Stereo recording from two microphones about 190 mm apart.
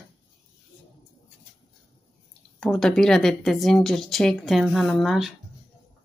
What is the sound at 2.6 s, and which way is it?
A woman's voice, 5° left (ahead or behind).